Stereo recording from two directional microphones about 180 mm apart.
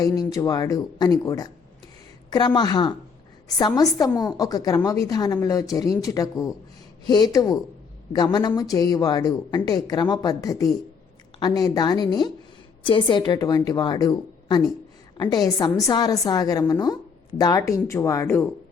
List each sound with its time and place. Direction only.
0.0 s a woman's voice: 20° left (ahead or behind)